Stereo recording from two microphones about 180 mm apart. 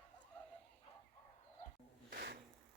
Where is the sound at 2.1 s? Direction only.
65° right (ahead or behind).